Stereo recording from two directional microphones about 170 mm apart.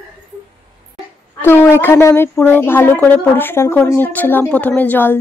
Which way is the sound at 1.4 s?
15° left (ahead or behind).